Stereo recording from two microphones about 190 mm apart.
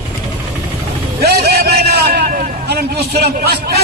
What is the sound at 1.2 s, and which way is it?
A man's voice, 55° right (ahead or behind).